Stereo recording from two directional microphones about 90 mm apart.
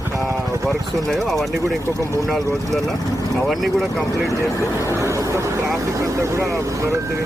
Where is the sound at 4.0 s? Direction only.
35° left (ahead or behind).